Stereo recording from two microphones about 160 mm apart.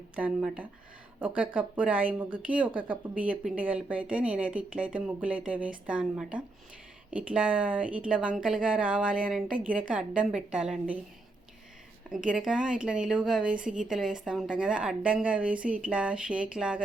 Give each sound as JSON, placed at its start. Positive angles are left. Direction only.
{"t": 0.2, "sound": "a woman's voice", "side_deg": -5}
{"t": 12.1, "sound": "a woman's voice", "side_deg": -5}